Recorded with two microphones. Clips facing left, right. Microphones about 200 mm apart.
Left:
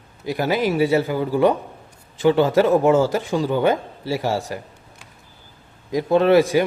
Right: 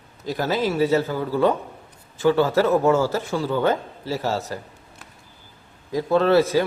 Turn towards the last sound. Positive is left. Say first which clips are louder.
# left 2 dB
turn(degrees=15)  # may be behind; listen again after turning